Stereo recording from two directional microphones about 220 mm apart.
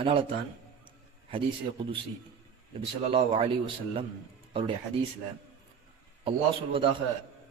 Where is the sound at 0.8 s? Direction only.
25° right (ahead or behind).